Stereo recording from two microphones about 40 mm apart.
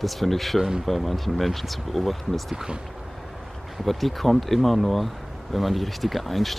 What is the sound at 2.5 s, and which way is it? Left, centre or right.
Speech, right.